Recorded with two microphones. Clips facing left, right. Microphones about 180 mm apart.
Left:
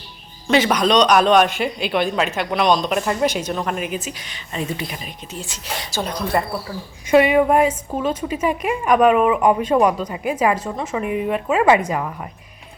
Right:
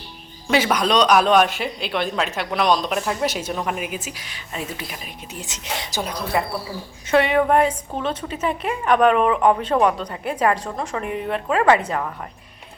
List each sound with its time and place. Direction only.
0.4 s a man's voice: 5° right (ahead or behind)
5.4 s speech: 20° right (ahead or behind)
6.0 s a man's voice: 5° right (ahead or behind)
7.1 s a woman's voice: 10° left (ahead or behind)